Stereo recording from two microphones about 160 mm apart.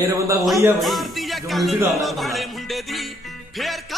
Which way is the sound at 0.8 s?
Centre (ahead or behind).